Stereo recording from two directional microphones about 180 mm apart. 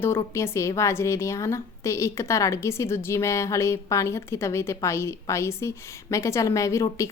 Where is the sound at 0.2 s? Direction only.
15° left (ahead or behind).